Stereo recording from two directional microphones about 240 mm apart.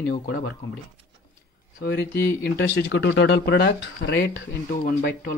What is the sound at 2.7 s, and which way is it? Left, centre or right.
Speech, left.